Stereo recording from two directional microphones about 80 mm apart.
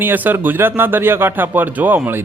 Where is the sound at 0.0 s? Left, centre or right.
Right.